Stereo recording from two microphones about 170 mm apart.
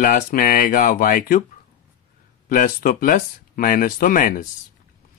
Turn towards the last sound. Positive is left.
turn(degrees=55)  # may be behind; listen again after turning